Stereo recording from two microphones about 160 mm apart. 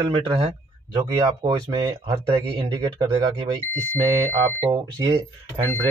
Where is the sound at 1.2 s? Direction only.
25° right (ahead or behind).